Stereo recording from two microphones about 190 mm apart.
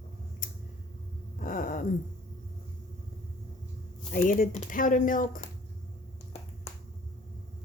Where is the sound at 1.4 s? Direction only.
45° left (ahead or behind).